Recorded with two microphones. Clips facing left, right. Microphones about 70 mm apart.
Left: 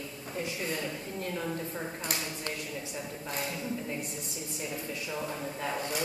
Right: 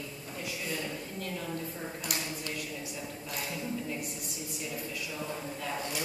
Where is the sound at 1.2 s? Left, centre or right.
Left.